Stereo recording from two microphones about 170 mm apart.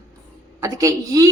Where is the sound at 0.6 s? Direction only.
20° right (ahead or behind).